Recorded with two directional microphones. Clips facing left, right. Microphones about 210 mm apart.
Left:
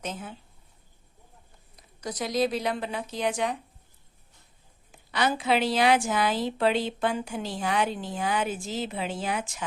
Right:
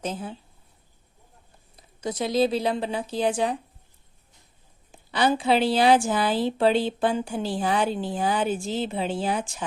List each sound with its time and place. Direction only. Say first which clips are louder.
0.0 s a woman's voice: right 5 dB; 30° right (ahead or behind)
1.7 s a woman's voice: right 5 dB; 25° right (ahead or behind)
4.9 s a woman's voice: right 4 dB; 30° right (ahead or behind)